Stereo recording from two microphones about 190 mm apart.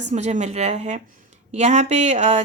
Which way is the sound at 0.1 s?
35° right (ahead or behind).